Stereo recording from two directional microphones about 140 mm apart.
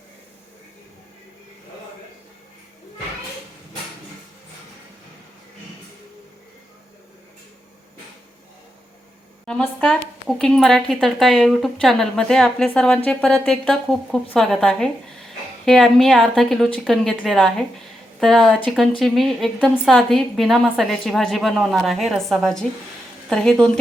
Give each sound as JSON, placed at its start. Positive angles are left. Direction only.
{"t": 9.5, "sound": "a woman's voice", "side_deg": 10}